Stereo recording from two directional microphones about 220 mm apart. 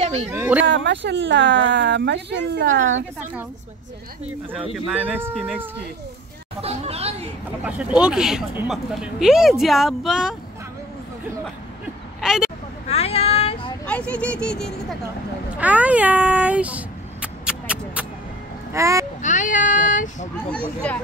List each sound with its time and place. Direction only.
0.0 s a sound: 30° right (ahead or behind)
0.3 s speech: 10° right (ahead or behind)
0.7 s speech: 55° right (ahead or behind); by 3.0 s 35° right (ahead or behind)
4.9 s speech: 10° right (ahead or behind)
6.6 s speech: 30° right (ahead or behind)
7.6 s speech: 5° right (ahead or behind)
12.2 s speech: centre (ahead or behind)
12.8 s a sound: 25° left (ahead or behind)
13.8 s speech: 5° left (ahead or behind)
15.5 s a sound: 5° right (ahead or behind)
18.7 s speech: 15° right (ahead or behind)
19.2 s speech: 35° left (ahead or behind)
20.9 s speech: 5° left (ahead or behind)